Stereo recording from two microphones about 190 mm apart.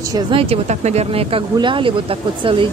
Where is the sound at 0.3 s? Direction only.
30° right (ahead or behind).